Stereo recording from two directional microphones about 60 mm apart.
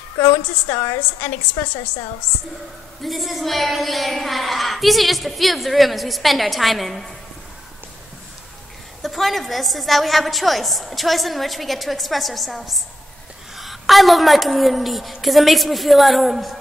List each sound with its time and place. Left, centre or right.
0.2 s a woman's voice: left
3.0 s a woman's voice: centre
9.0 s a woman's voice: centre